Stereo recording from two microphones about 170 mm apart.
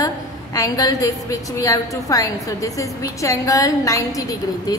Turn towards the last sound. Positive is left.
turn(degrees=20)  # may be behind; listen again after turning